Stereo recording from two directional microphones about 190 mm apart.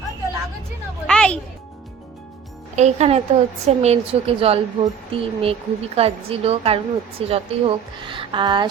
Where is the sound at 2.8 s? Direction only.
35° right (ahead or behind).